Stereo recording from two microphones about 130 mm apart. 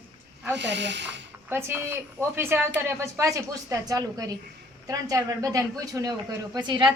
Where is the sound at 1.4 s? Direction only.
15° right (ahead or behind).